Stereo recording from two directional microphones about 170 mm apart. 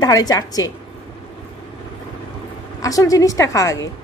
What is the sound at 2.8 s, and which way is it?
Speech, 20° left (ahead or behind).